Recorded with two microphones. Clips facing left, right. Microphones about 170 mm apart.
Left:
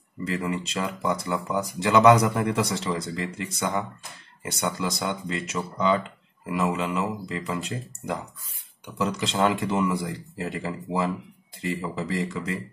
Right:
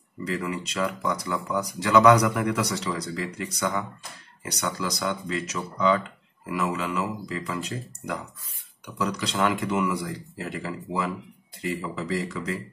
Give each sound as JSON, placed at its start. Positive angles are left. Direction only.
{"t": 0.4, "sound": "speech", "side_deg": 25}